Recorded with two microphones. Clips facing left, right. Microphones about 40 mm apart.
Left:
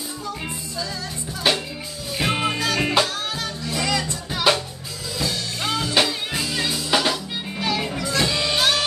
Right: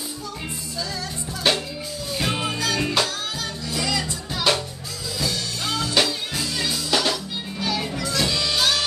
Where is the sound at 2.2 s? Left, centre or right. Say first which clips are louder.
Left 3 dB; centre.